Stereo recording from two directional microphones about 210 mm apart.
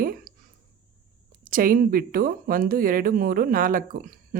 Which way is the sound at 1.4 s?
40° right (ahead or behind).